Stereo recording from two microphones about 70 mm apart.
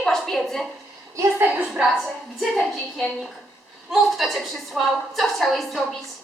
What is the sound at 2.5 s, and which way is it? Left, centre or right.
Speech, centre.